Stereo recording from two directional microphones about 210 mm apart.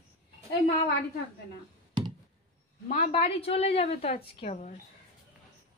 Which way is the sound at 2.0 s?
20° right (ahead or behind).